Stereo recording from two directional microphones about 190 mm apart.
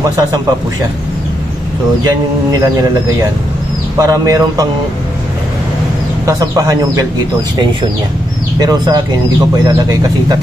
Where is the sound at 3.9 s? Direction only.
15° right (ahead or behind).